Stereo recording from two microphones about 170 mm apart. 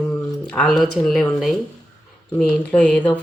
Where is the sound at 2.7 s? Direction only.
10° left (ahead or behind).